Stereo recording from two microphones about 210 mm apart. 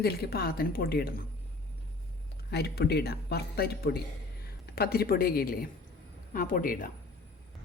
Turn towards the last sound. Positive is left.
turn(degrees=40)  # may be behind; listen again after turning